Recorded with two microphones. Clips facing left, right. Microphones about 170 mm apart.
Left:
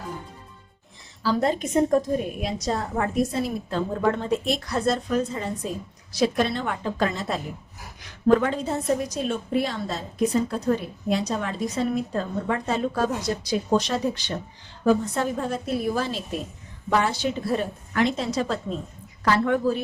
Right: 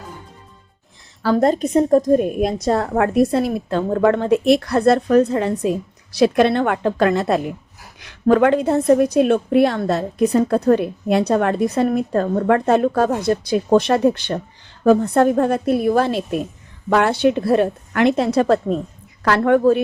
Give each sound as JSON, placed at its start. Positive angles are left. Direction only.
{"t": 1.2, "sound": "a woman's voice", "side_deg": -50}
{"t": 2.1, "sound": "a woman's voice", "side_deg": -50}